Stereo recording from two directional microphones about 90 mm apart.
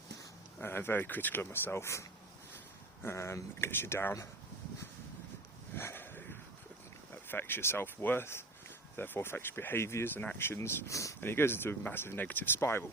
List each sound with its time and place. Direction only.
0.6 s speech: 25° left (ahead or behind)
5.7 s a sound: 25° left (ahead or behind)
7.1 s speech: 25° left (ahead or behind)
11.2 s speech: 25° left (ahead or behind)